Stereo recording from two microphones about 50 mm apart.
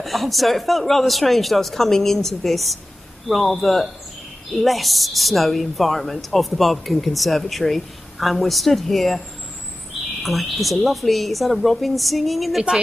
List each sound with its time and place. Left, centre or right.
0.0 s speech: centre
10.2 s speech: centre